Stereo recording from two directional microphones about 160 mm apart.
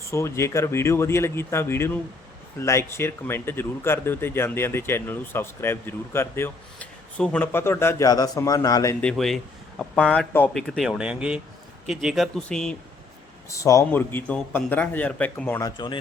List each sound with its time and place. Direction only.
0.0 s speech: 15° left (ahead or behind)
9.0 s speech: 5° left (ahead or behind)
13.5 s speech: 20° left (ahead or behind)
15.6 s speech: 30° left (ahead or behind)